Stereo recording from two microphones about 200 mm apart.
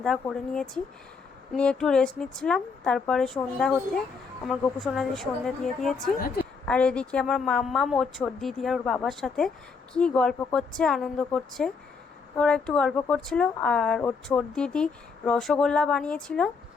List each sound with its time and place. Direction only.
0.0 s speech: 5° left (ahead or behind)
6.1 s a woman's voice: 50° left (ahead or behind)
6.7 s speech: 5° left (ahead or behind)